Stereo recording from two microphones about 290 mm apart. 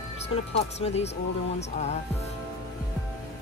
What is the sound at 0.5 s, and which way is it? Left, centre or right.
Speech, left.